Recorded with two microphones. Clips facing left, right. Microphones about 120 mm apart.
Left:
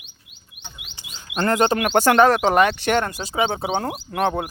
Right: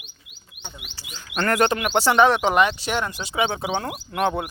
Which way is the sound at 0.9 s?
30° left (ahead or behind).